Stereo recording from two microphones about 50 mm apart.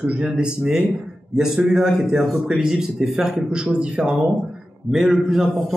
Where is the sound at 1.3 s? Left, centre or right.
Centre.